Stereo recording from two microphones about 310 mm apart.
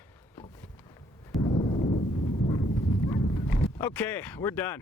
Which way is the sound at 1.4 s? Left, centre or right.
Left.